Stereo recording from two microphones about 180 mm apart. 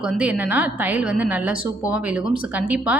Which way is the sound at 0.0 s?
5° right (ahead or behind).